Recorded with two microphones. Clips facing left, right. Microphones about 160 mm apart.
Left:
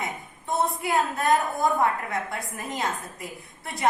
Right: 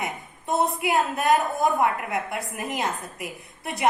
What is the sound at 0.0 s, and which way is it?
A woman's voice, 20° right (ahead or behind).